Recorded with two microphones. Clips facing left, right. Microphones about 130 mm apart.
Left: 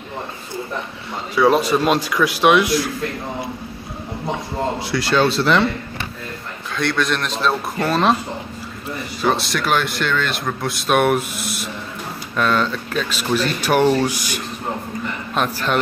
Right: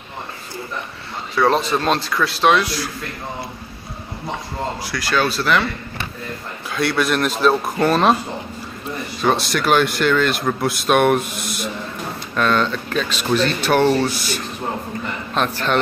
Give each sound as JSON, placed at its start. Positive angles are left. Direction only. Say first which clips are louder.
{"t": 1.3, "sound": "speech", "louder": "left 2 dB", "side_deg": 10}
{"t": 4.9, "sound": "speech", "louder": "left 3 dB", "side_deg": 25}
{"t": 6.7, "sound": "speech", "louder": "right 1 dB", "side_deg": -5}
{"t": 9.2, "sound": "speech", "louder": "right 1 dB", "side_deg": 0}